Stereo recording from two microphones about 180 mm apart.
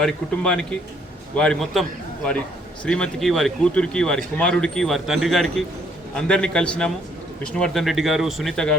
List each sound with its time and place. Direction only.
0.0 s speech: 5° left (ahead or behind)